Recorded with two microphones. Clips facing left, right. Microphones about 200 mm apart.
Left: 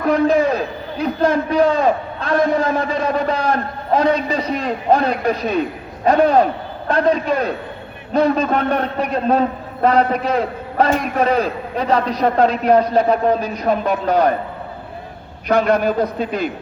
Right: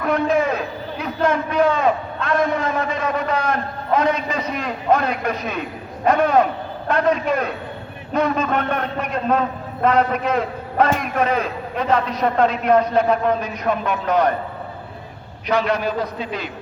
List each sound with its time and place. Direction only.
0.0 s a man's voice: 35° left (ahead or behind)
15.4 s a man's voice: 50° left (ahead or behind)